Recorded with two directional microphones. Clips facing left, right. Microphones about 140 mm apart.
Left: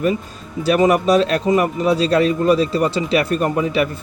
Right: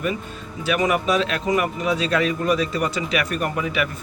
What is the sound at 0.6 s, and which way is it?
A man's voice, 35° left (ahead or behind).